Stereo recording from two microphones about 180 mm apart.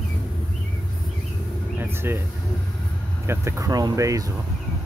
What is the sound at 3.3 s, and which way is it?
Speech, 15° right (ahead or behind).